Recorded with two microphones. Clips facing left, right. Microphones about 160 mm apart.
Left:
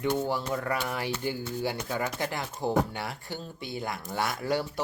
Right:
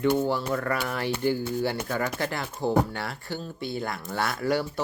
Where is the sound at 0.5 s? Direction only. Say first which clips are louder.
Right 2 dB; 15° left (ahead or behind).